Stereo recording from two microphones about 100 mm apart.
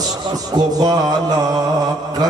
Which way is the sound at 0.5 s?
40° right (ahead or behind).